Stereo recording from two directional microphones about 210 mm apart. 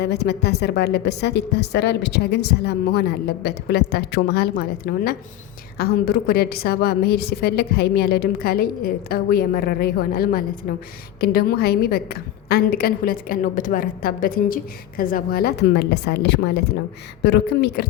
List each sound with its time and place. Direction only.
0.0 s a woman's voice: 50° left (ahead or behind)